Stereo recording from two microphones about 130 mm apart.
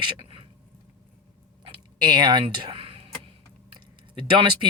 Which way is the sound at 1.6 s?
35° right (ahead or behind).